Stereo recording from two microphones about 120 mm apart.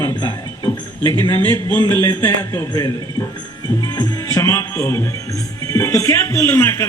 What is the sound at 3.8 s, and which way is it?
Music, 35° left (ahead or behind).